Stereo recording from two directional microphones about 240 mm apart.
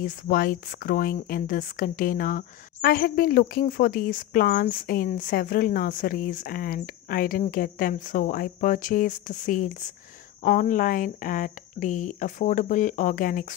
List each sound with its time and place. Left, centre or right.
0.0 s speech: left